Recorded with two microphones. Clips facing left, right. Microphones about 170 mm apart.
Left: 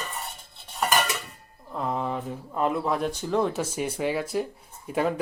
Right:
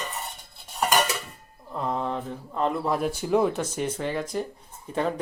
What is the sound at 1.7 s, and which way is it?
Speech, 5° left (ahead or behind).